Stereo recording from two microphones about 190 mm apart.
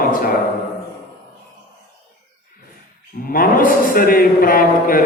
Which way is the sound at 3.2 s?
50° left (ahead or behind).